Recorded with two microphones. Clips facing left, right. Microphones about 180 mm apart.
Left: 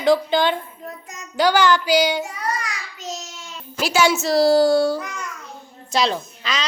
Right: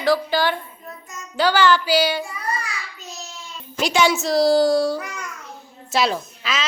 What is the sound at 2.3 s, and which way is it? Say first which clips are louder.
Child singing: left 1 dB; 85° left.